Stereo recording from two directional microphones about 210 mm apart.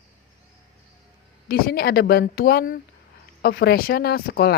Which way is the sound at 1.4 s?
45° left (ahead or behind).